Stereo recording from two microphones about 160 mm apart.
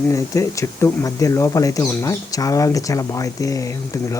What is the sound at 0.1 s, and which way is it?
Speech, 20° left (ahead or behind).